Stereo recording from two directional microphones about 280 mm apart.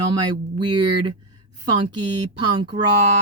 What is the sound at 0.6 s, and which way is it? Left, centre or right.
Speech, centre.